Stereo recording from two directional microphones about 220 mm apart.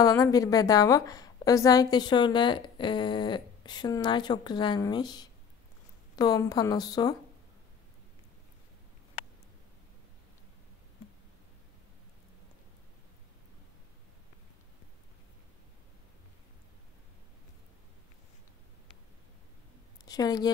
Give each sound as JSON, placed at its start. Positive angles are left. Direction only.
{"t": 0.0, "sound": "a woman's voice", "side_deg": 15}
{"t": 20.1, "sound": "speech", "side_deg": 15}